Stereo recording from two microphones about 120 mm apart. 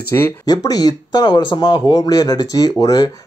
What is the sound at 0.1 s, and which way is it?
Speech, 25° left (ahead or behind).